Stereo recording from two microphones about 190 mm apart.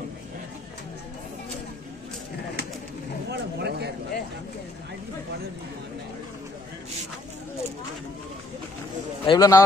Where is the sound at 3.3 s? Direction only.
60° right (ahead or behind).